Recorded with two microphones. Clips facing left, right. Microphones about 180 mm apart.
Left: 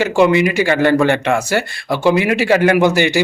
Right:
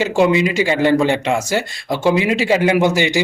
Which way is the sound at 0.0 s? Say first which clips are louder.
Left 2 dB; 15° right (ahead or behind).